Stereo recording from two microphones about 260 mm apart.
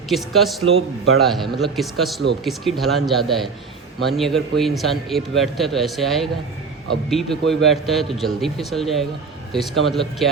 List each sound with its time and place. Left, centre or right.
0.1 s a man's voice: centre
0.6 s a man's voice: right
1.2 s a man's voice: centre